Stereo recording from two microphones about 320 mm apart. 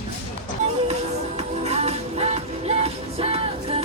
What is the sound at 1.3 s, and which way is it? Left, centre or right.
Music, centre.